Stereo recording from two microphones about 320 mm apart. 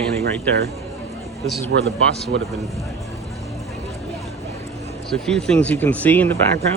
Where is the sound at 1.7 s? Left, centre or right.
Right.